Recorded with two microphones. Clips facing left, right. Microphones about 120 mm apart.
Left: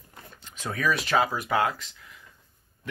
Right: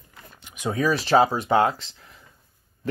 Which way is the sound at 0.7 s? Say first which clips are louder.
Right 5 dB; 30° right (ahead or behind).